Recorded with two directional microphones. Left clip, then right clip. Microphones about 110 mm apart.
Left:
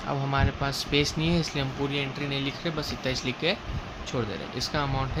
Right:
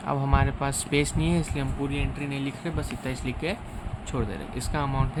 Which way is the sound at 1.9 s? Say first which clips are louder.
Left 2 dB; 5° right (ahead or behind).